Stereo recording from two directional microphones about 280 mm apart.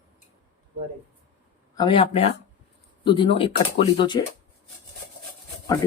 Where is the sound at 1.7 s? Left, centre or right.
Centre.